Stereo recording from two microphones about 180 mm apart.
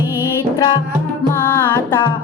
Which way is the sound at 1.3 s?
10° left (ahead or behind).